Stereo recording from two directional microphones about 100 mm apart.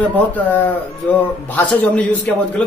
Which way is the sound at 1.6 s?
15° left (ahead or behind).